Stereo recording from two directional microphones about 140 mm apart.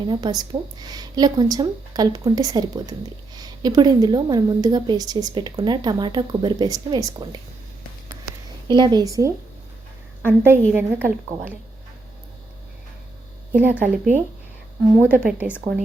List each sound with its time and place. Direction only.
0.1 s a woman's voice: 30° right (ahead or behind)
8.6 s a woman's voice: 30° right (ahead or behind)
13.5 s a woman's voice: 10° right (ahead or behind)